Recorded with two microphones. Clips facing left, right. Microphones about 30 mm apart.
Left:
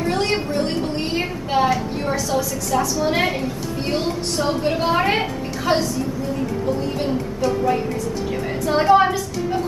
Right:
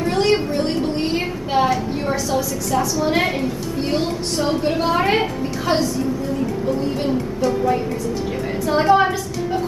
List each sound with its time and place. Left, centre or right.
0.0 s a sound: centre
3.9 s a woman's voice: centre
8.6 s a woman's voice: centre